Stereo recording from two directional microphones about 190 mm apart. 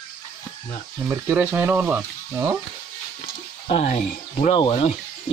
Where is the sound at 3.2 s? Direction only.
35° left (ahead or behind).